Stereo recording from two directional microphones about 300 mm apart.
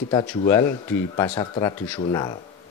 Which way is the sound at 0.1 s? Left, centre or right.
Centre.